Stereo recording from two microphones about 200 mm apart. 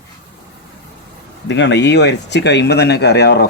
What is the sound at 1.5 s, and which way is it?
Speech, 60° left (ahead or behind).